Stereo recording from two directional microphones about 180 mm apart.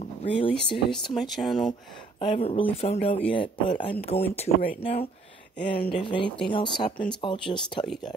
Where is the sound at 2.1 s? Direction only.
30° left (ahead or behind).